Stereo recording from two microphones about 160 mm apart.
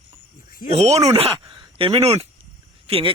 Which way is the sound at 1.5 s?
30° right (ahead or behind).